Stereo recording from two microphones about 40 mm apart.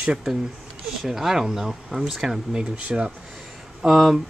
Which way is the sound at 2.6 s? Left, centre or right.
Right.